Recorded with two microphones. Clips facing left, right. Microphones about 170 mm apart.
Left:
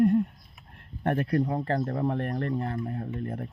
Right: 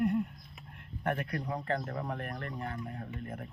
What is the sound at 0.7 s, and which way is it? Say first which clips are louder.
Speech: left 6 dB; 30° left (ahead or behind).